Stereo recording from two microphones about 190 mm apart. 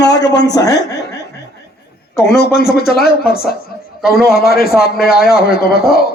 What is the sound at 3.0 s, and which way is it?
Speech, 55° left (ahead or behind).